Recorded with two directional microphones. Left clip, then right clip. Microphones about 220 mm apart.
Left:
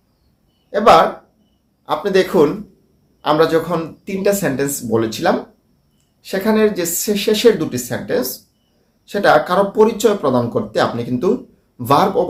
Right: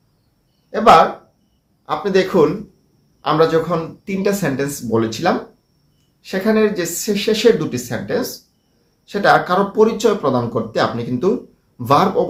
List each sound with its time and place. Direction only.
0.7 s speech: 15° left (ahead or behind)